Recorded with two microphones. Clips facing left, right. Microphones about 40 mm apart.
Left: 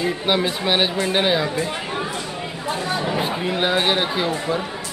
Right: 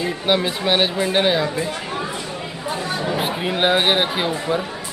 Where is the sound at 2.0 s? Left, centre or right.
Centre.